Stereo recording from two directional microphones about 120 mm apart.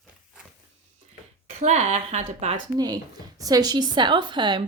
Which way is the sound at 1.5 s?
70° right (ahead or behind).